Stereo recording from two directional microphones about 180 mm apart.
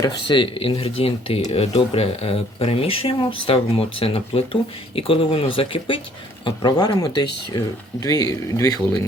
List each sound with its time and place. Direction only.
0.3 s speech: 30° left (ahead or behind)